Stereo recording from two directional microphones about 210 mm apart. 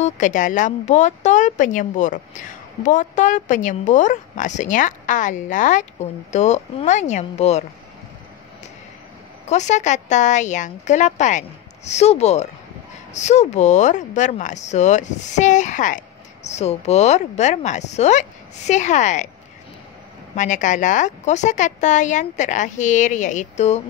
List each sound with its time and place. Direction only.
0.0 s speech: 35° left (ahead or behind)
9.5 s speech: 35° left (ahead or behind)
20.3 s speech: 35° left (ahead or behind)